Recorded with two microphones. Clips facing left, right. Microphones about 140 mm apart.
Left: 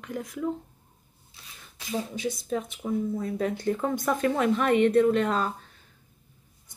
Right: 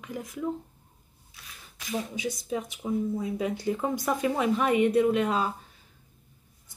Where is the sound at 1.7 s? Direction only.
25° left (ahead or behind).